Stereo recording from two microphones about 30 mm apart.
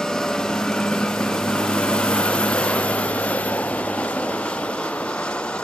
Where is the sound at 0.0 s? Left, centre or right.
Left.